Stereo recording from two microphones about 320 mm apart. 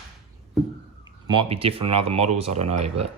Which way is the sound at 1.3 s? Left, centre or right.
Centre.